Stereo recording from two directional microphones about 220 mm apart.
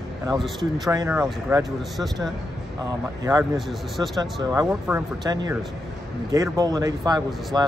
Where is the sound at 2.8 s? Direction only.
15° right (ahead or behind).